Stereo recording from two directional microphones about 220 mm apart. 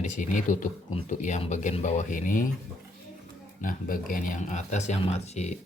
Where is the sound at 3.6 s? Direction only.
40° left (ahead or behind).